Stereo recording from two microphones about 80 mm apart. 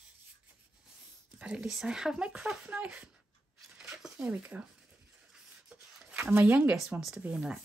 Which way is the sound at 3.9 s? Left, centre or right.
Centre.